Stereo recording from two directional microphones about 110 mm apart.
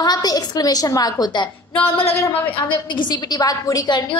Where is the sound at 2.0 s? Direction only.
60° left (ahead or behind).